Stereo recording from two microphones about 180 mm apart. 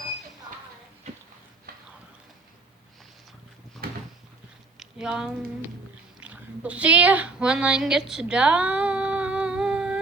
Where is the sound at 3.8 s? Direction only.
60° right (ahead or behind).